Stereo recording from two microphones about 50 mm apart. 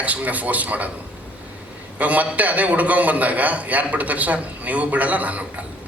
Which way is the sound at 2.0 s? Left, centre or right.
Right.